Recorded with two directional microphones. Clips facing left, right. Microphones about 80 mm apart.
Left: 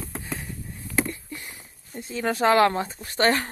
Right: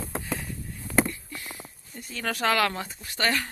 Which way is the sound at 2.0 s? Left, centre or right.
Left.